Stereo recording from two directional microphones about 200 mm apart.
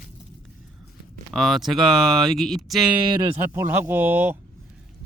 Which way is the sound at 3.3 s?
10° right (ahead or behind).